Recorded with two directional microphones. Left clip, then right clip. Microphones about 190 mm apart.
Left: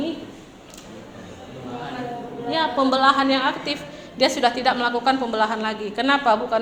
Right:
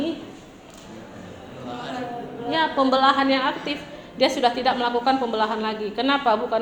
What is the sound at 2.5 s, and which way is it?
A woman's voice, 25° left (ahead or behind).